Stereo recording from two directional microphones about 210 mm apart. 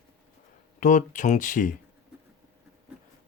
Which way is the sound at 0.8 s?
35° left (ahead or behind).